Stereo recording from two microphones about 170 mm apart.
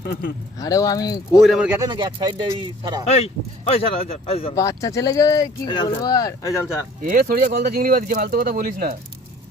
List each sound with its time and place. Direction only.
0.0 s speech: 60° left (ahead or behind)
0.6 s speech: 20° left (ahead or behind)
1.4 s speech: centre (ahead or behind)
1.8 s speech: 25° right (ahead or behind)
3.1 s speech: 35° left (ahead or behind)
4.5 s speech: 20° left (ahead or behind)
7.0 s speech: 55° right (ahead or behind)